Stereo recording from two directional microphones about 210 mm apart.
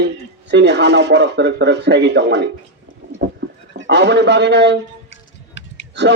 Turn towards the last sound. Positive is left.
turn(degrees=60)  # may be behind; listen again after turning